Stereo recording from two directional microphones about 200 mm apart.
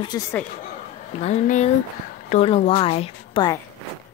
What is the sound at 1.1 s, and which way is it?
A woman's voice, 35° left (ahead or behind).